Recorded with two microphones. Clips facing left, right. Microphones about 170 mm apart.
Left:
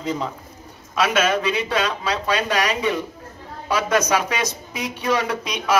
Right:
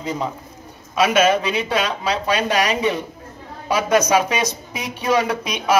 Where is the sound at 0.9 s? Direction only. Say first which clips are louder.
Right 4 dB; 20° right (ahead or behind).